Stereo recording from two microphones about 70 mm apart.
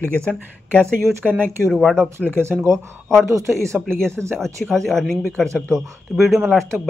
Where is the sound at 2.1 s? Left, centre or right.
Right.